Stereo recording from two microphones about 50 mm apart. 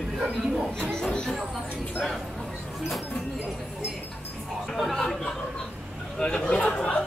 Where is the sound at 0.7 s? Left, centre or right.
Centre.